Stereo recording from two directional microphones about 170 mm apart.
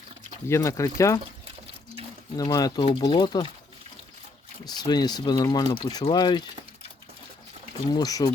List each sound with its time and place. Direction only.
0.4 s speech: 15° left (ahead or behind)
2.3 s speech: 20° left (ahead or behind)
4.6 s speech: 25° left (ahead or behind)
7.9 s speech: 20° left (ahead or behind)